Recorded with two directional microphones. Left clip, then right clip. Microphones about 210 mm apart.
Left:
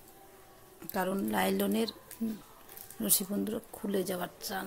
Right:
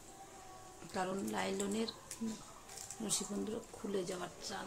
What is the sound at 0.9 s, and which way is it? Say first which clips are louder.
A woman's voice: left 6 dB; 50° left (ahead or behind).